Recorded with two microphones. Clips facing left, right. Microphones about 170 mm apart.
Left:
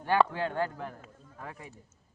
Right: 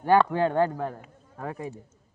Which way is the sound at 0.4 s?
45° right (ahead or behind).